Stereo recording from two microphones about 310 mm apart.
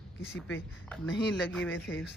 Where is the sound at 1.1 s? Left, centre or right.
Left.